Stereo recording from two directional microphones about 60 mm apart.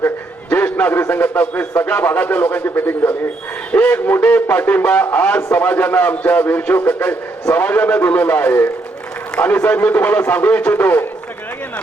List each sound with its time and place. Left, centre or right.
0.5 s a man's voice: left